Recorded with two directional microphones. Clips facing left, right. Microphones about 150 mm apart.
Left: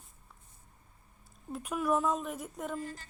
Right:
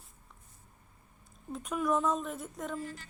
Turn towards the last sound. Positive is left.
turn(degrees=40)  # may be behind; listen again after turning